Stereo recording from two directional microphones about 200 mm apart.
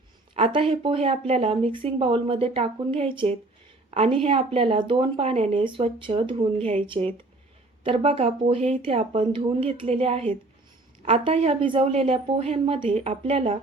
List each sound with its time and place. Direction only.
0.3 s a woman's voice: 30° right (ahead or behind)